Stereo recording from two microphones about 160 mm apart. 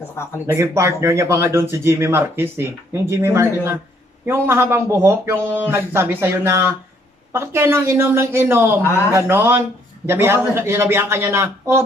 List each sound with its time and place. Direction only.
0.5 s speech: 15° right (ahead or behind)